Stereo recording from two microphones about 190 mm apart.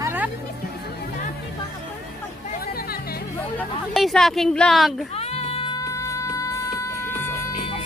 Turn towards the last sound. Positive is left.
turn(degrees=15)  # may be behind; listen again after turning